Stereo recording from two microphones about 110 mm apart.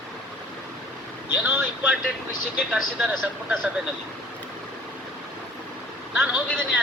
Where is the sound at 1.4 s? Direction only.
15° right (ahead or behind).